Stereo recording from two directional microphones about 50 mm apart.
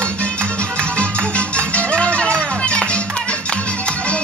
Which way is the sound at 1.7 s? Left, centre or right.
Left.